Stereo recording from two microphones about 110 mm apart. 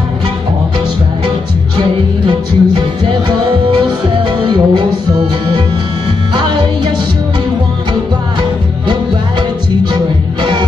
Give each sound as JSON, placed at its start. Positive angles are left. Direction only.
{"t": 1.8, "sound": "music", "side_deg": -45}
{"t": 6.3, "sound": "music", "side_deg": -45}